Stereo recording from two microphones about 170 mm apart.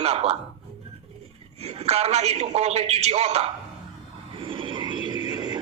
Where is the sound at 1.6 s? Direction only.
40° right (ahead or behind).